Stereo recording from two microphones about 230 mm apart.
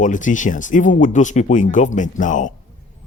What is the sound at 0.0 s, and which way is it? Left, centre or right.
Speech, left.